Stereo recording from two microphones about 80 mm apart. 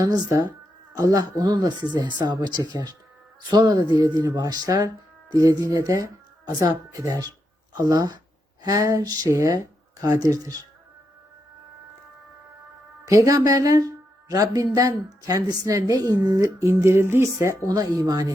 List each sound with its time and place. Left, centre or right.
0.9 s speech: right
13.1 s speech: right
17.7 s speech: right